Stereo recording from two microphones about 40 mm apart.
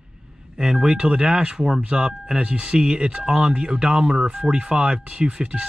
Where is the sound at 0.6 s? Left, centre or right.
Centre.